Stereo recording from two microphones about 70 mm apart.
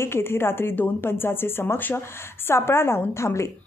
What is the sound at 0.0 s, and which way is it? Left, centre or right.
A woman's voice, left.